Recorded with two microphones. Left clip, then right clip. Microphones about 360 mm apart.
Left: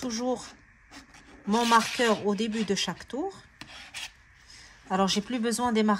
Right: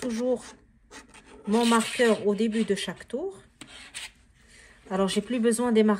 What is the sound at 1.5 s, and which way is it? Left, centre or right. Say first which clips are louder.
Speech: left 1 dB; centre.